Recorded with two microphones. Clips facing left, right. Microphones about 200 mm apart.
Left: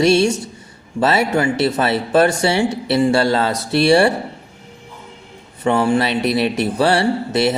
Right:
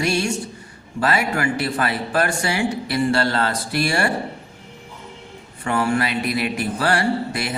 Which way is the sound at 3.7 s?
25° left (ahead or behind).